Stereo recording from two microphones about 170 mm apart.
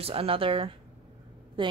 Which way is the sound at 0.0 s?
35° right (ahead or behind).